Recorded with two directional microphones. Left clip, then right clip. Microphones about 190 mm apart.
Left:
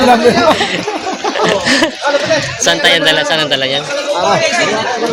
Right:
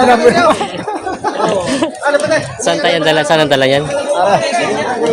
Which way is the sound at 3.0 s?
40° right (ahead or behind).